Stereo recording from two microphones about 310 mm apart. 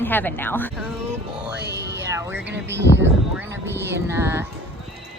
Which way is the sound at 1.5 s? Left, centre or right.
Right.